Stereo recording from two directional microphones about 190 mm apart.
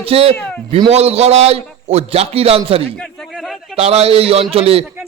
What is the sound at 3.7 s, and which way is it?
A man's voice, 30° right (ahead or behind).